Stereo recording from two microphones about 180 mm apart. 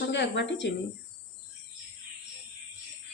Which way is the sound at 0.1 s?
75° left (ahead or behind).